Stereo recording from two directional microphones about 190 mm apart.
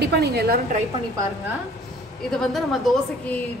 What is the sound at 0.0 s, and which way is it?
Speech, 55° right (ahead or behind).